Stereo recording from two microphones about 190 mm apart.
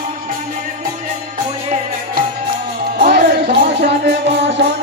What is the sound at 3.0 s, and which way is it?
Music, 60° right (ahead or behind).